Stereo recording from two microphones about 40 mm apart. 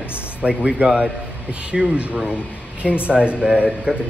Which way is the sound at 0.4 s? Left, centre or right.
Right.